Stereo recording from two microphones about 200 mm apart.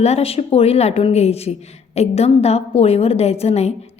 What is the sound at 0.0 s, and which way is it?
Speech, 30° left (ahead or behind).